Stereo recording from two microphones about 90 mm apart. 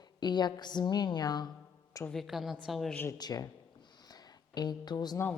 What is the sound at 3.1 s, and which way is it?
Speech, 45° left (ahead or behind).